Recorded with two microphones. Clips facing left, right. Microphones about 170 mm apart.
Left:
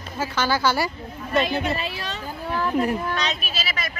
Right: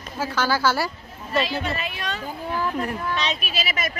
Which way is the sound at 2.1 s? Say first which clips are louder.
Left 1 dB; 5° right (ahead or behind).